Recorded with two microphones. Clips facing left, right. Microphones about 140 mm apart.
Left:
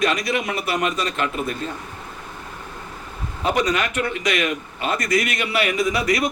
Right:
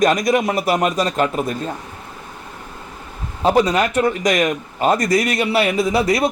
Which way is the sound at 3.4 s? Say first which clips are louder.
Right 6 dB; 30° right (ahead or behind).